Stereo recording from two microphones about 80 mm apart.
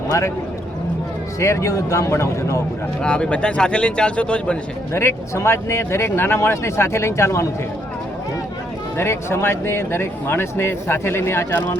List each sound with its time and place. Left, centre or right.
1.4 s speech: left
3.0 s speech: centre
4.9 s speech: left
9.0 s speech: left